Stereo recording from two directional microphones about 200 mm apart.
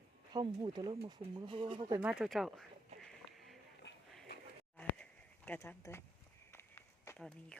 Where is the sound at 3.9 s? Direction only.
65° left (ahead or behind).